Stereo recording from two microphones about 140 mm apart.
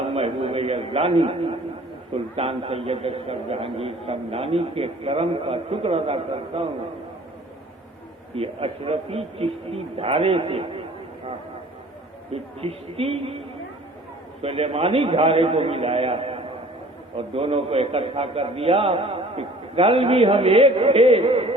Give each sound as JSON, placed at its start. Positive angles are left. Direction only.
{"t": 0.1, "sound": "a sound", "side_deg": -45}
{"t": 2.1, "sound": "a man's voice", "side_deg": -45}
{"t": 8.4, "sound": "a man's voice", "side_deg": -45}
{"t": 12.3, "sound": "a man's voice", "side_deg": -45}
{"t": 14.4, "sound": "a man's voice", "side_deg": -45}